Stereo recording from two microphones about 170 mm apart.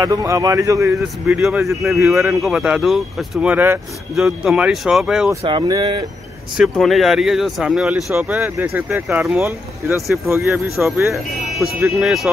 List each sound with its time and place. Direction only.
0.0 s a man's voice: 20° right (ahead or behind)
1.3 s speech: 10° right (ahead or behind)
5.4 s a man's voice: 30° right (ahead or behind)
6.5 s speech: centre (ahead or behind)